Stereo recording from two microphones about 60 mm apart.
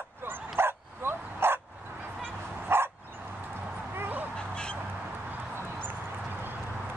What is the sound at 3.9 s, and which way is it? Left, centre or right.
Dog, right.